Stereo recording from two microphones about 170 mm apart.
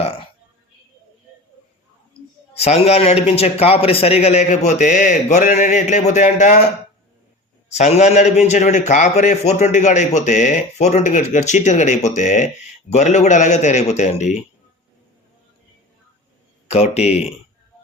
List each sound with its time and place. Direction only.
2.6 s a man's voice: 35° left (ahead or behind)
7.8 s a man's voice: 40° left (ahead or behind)
16.6 s a man's voice: 35° left (ahead or behind)